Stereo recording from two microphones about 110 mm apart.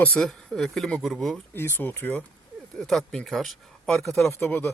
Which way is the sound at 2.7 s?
5° left (ahead or behind).